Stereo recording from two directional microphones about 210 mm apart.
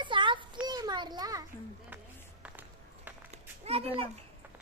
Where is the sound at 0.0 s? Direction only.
25° right (ahead or behind).